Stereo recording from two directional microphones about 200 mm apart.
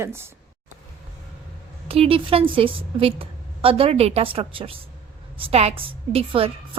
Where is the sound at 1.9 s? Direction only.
30° right (ahead or behind).